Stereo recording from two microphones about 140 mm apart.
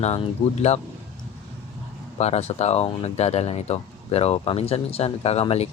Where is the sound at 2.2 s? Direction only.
50° left (ahead or behind).